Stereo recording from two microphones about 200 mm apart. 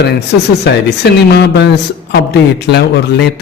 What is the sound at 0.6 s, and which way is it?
Speech, 55° left (ahead or behind).